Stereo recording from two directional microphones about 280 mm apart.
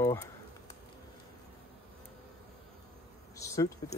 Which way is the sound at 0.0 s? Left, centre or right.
Centre.